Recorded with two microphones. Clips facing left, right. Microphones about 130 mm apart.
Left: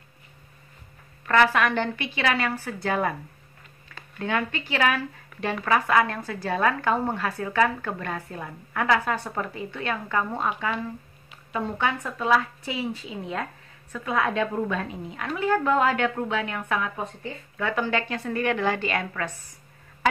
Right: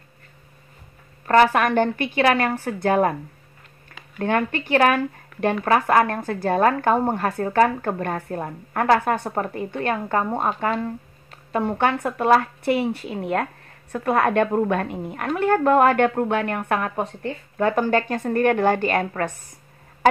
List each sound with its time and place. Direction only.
1.2 s speech: 40° right (ahead or behind)
4.2 s speech: 50° right (ahead or behind)
11.5 s a woman's voice: 60° right (ahead or behind)
17.6 s speech: 45° right (ahead or behind)